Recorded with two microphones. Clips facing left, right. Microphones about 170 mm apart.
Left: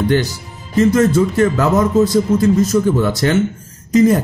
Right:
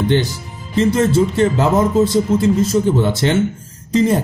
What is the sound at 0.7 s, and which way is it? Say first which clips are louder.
Speech: left 2 dB; 30° right (ahead or behind).